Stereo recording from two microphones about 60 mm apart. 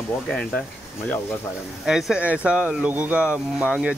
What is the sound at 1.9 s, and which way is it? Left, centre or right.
Speech, centre.